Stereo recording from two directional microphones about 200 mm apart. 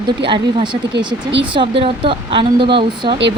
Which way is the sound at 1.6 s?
25° right (ahead or behind).